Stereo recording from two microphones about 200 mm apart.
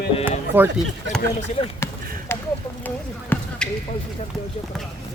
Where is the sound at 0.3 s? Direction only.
10° right (ahead or behind).